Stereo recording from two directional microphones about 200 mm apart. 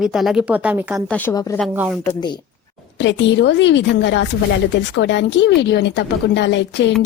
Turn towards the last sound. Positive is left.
turn(degrees=60)  # may be behind; listen again after turning